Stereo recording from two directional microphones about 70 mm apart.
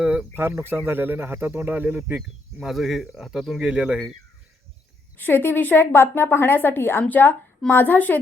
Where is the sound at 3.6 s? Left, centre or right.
Centre.